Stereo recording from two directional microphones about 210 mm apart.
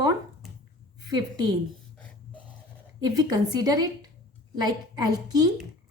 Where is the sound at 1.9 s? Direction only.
5° left (ahead or behind).